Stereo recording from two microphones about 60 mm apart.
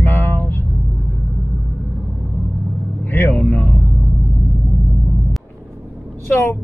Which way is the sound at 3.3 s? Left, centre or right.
Left.